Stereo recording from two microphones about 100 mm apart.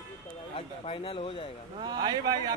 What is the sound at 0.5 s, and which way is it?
Speech, 60° left (ahead or behind).